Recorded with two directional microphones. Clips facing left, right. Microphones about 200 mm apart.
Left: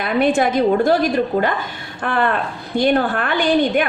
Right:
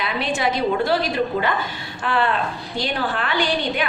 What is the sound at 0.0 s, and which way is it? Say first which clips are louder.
A woman's voice: left 7 dB; 55° left (ahead or behind).